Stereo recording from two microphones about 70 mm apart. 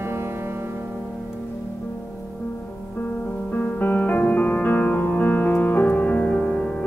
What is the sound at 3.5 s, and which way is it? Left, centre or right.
Music, centre.